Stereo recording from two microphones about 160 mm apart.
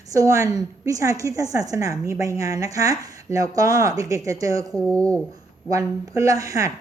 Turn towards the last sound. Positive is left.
turn(degrees=-20)  # may be behind; listen again after turning